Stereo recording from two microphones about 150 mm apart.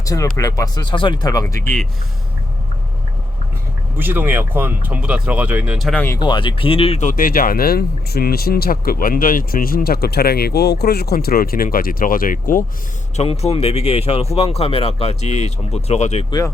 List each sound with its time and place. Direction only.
0.0 s speech: 20° left (ahead or behind)
3.9 s speech: 15° right (ahead or behind)
5.9 s speech: 10° left (ahead or behind)
6.1 s speech: 30° left (ahead or behind)
7.1 s speech: 70° left (ahead or behind)
13.1 s speech: 45° left (ahead or behind)